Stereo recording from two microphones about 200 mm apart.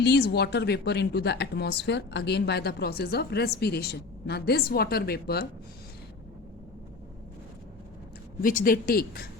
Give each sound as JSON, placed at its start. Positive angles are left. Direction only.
{"t": 0.0, "sound": "a woman's voice", "side_deg": 55}
{"t": 8.4, "sound": "a woman's voice", "side_deg": 45}